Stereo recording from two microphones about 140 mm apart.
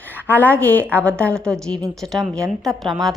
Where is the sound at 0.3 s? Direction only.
10° left (ahead or behind).